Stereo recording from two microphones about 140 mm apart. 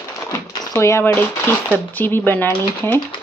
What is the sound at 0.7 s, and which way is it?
Speech, 20° left (ahead or behind).